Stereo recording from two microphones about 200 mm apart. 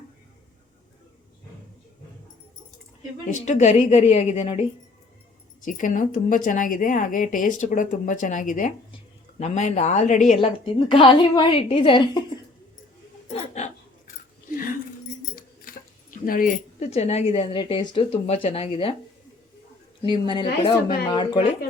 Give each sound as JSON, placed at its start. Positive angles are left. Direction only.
{"t": 3.2, "sound": "speech", "side_deg": 40}
{"t": 5.6, "sound": "speech", "side_deg": 40}
{"t": 13.3, "sound": "chuckle", "side_deg": 35}
{"t": 14.5, "sound": "dog", "side_deg": 45}
{"t": 16.2, "sound": "speech", "side_deg": 45}
{"t": 16.9, "sound": "speech", "side_deg": 30}
{"t": 20.0, "sound": "speech", "side_deg": 25}